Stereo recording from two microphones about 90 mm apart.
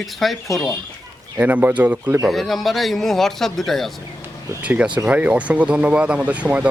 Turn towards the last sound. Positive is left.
turn(degrees=-15)  # may be behind; listen again after turning